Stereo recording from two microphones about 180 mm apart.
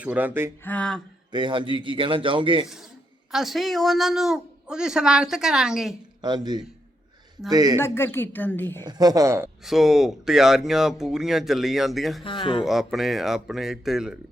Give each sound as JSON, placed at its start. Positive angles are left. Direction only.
{"t": 0.0, "sound": "speech", "side_deg": -10}
{"t": 0.6, "sound": "a woman's voice", "side_deg": 10}
{"t": 1.3, "sound": "a man's voice", "side_deg": -25}
{"t": 3.3, "sound": "a woman's voice", "side_deg": 0}
{"t": 6.2, "sound": "a man's voice", "side_deg": -25}
{"t": 7.8, "sound": "a woman's voice", "side_deg": 15}
{"t": 8.8, "sound": "a man's voice", "side_deg": -20}
{"t": 9.6, "sound": "a woman's voice", "side_deg": 0}
{"t": 12.2, "sound": "speech", "side_deg": 30}
{"t": 12.6, "sound": "a woman's voice", "side_deg": 0}